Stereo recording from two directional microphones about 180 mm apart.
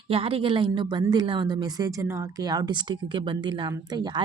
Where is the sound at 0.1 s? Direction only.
30° right (ahead or behind).